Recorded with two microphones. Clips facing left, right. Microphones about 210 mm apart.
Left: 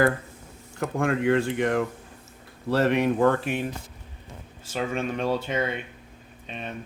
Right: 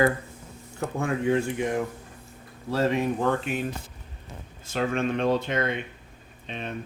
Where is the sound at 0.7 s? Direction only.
90° left.